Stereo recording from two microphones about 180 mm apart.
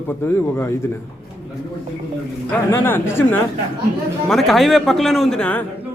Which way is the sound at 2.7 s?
15° left (ahead or behind).